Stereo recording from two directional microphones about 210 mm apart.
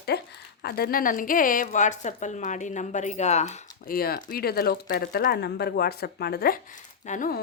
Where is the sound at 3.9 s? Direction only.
45° left (ahead or behind).